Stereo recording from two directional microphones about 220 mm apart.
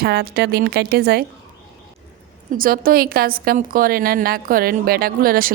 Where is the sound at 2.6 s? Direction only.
40° right (ahead or behind).